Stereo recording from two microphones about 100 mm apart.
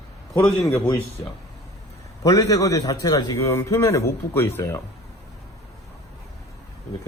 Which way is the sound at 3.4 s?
30° left (ahead or behind).